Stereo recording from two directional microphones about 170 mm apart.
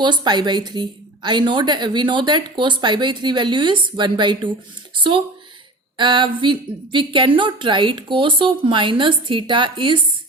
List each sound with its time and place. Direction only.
0.0 s a woman's voice: 25° right (ahead or behind)
6.0 s a woman's voice: 30° right (ahead or behind)